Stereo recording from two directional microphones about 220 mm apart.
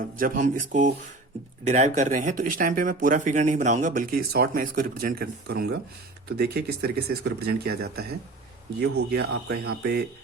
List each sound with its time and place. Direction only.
0.2 s speech: 35° right (ahead or behind)
9.0 s speech: 45° right (ahead or behind)